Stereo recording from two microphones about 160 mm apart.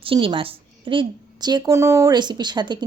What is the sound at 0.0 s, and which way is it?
A woman's voice, 35° right (ahead or behind).